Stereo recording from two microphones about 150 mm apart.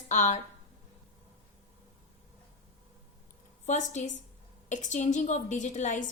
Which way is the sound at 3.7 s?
55° left (ahead or behind).